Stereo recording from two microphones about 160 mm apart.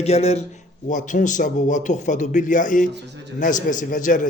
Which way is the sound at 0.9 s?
50° left (ahead or behind).